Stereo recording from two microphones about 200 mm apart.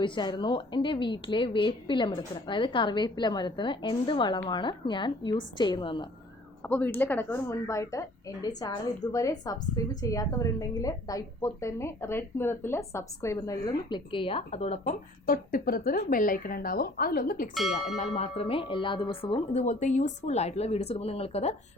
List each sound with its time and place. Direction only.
0.0 s a woman's voice: 25° left (ahead or behind)
6.6 s a woman's voice: 10° left (ahead or behind); by 14.9 s 30° left (ahead or behind)
15.3 s speech: 45° left (ahead or behind)
17.5 s speech: centre (ahead or behind)
17.9 s a woman's voice: 35° left (ahead or behind)